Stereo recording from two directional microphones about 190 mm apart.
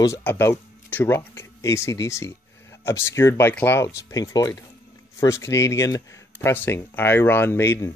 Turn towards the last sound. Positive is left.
turn(degrees=15)  # may be behind; listen again after turning